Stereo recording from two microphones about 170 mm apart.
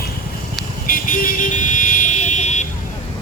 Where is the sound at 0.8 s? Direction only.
55° left (ahead or behind).